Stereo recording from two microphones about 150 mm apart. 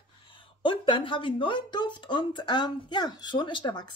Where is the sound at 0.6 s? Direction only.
35° left (ahead or behind).